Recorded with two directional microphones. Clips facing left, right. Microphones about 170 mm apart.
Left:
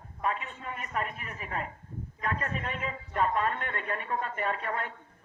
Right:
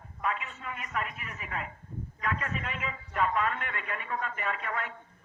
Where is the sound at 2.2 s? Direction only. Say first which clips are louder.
Left 1 dB; 40° left (ahead or behind).